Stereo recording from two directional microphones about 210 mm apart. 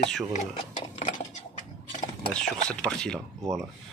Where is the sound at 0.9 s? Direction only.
35° left (ahead or behind).